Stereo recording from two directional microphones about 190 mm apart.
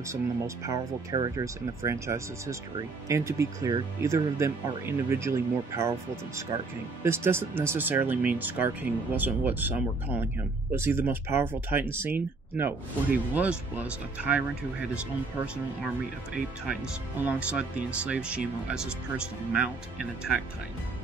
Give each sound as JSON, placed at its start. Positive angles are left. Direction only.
{"t": 0.7, "sound": "speech", "side_deg": -20}
{"t": 17.2, "sound": "speech", "side_deg": -5}